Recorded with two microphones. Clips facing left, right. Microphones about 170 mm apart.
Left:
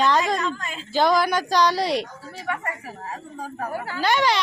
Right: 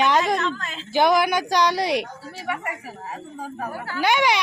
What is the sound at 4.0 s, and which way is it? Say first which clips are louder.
Speech: right 1 dB; 15° right (ahead or behind).